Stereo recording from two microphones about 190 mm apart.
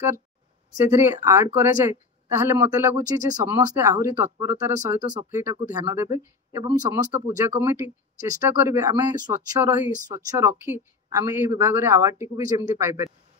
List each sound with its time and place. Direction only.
0.7 s speech: 10° right (ahead or behind)